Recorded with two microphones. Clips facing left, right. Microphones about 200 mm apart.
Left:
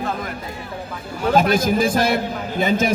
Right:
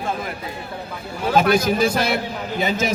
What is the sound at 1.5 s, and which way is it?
A man's voice, 50° left (ahead or behind).